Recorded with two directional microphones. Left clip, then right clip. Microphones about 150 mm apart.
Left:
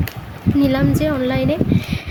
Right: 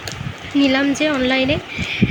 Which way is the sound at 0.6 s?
20° left (ahead or behind).